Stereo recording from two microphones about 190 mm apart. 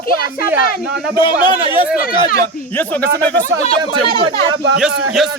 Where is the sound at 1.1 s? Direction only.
25° left (ahead or behind).